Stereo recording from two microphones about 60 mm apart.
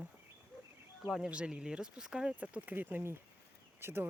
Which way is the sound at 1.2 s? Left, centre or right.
Centre.